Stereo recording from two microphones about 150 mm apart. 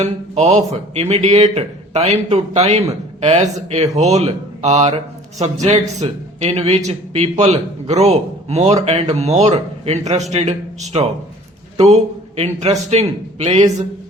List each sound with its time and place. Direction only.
0.0 s a man's voice: 50° right (ahead or behind)